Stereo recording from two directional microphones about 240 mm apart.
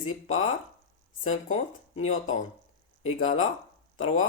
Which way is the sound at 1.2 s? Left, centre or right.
Left.